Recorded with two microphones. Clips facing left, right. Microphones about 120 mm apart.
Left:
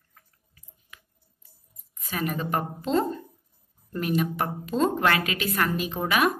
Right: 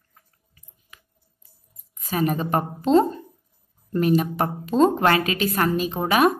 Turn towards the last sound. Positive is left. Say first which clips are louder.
# right 5 dB
turn(degrees=-30)  # may be behind; listen again after turning